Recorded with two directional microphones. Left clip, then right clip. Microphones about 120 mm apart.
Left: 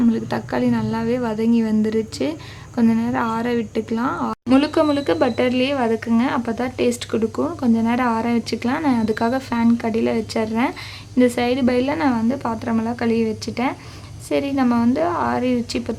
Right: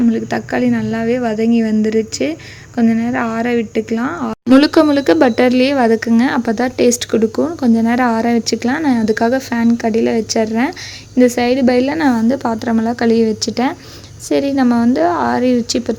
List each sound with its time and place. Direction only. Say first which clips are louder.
0.1 s a woman's voice: right 5 dB; 20° right (ahead or behind)
4.5 s a woman's voice: right 7 dB; 45° right (ahead or behind); by 16.0 s 30° right (ahead or behind)